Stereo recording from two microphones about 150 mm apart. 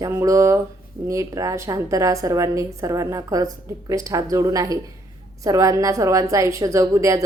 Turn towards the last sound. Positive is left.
turn(degrees=-20)  # may be behind; listen again after turning